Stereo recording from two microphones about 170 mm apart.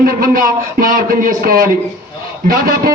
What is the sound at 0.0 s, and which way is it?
A man's voice, 60° right (ahead or behind).